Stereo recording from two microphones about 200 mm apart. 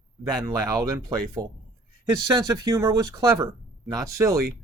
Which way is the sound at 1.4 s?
15° right (ahead or behind).